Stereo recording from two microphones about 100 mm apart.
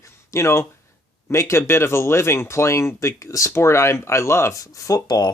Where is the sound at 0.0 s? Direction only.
30° left (ahead or behind).